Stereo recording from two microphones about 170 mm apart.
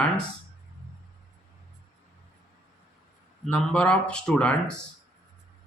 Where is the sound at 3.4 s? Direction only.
5° left (ahead or behind).